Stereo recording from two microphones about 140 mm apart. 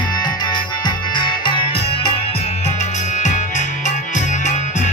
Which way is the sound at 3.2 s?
60° left (ahead or behind).